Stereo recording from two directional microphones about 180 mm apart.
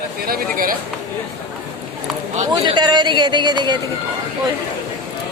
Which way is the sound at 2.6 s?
25° right (ahead or behind).